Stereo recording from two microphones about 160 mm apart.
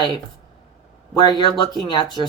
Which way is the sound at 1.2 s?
25° left (ahead or behind).